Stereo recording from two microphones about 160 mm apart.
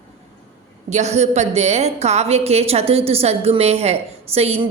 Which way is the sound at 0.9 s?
45° right (ahead or behind).